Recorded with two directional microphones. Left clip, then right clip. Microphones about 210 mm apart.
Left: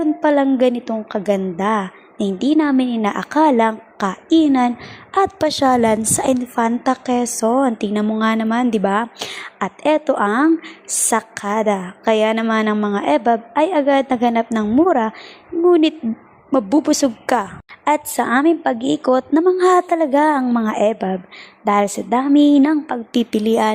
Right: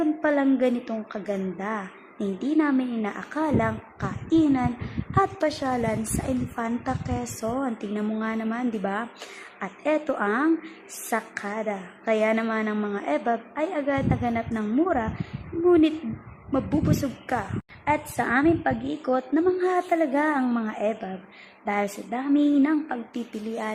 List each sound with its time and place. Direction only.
0.0 s a woman's voice: 35° left (ahead or behind)
16.5 s a woman's voice: 40° left (ahead or behind)